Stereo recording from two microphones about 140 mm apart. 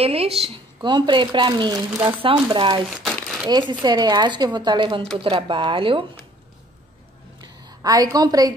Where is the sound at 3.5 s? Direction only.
30° right (ahead or behind).